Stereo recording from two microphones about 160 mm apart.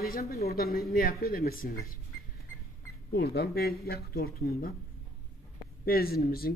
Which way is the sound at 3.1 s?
80° left.